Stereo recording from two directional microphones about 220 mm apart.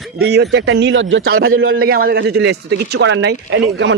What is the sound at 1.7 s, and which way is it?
Speech, 40° right (ahead or behind).